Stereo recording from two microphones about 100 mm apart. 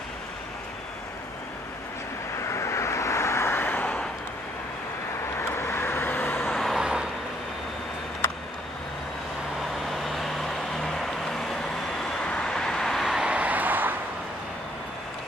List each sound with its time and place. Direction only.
2.4 s vehicle: 30° left (ahead or behind)
5.5 s vehicle: 25° left (ahead or behind)
6.5 s vehicle: 5° left (ahead or behind)
6.8 s vehicle: 10° right (ahead or behind)
10.0 s vehicle: 5° left (ahead or behind); by 13.9 s 20° right (ahead or behind)